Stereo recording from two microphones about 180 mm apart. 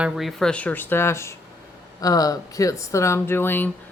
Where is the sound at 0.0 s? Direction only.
Centre (ahead or behind).